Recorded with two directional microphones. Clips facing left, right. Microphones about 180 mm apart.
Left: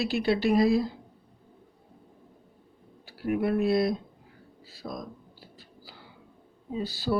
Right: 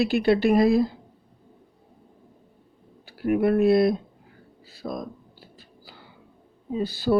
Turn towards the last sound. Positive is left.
turn(degrees=-55)  # may be behind; listen again after turning